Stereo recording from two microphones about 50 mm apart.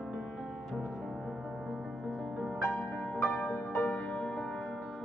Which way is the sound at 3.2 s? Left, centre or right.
Left.